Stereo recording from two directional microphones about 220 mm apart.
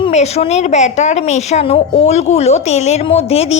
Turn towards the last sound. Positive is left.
turn(degrees=25)  # may be behind; listen again after turning